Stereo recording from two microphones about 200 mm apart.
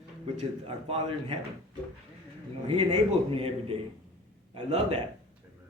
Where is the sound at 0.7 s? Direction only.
30° right (ahead or behind).